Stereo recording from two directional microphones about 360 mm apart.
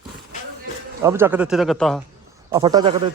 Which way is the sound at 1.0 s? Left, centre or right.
Centre.